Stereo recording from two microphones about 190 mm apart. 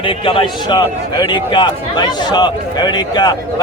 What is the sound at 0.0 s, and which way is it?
A man's voice, 25° left (ahead or behind).